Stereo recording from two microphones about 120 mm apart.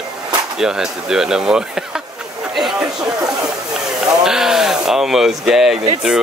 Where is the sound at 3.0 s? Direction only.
30° right (ahead or behind).